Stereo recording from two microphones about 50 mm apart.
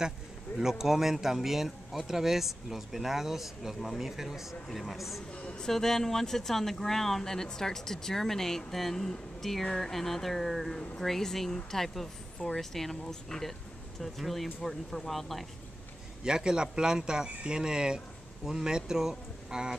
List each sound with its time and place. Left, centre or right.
0.6 s speech: centre
5.3 s speech: left
5.7 s speech: centre
16.3 s speech: centre